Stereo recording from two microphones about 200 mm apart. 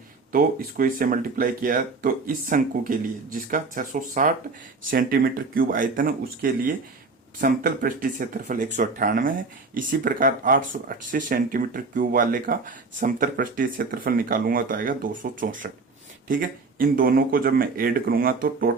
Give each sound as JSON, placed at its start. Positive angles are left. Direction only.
{"t": 0.3, "sound": "speech", "side_deg": -45}